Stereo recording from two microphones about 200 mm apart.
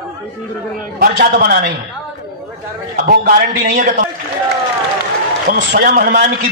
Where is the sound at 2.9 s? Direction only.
45° right (ahead or behind).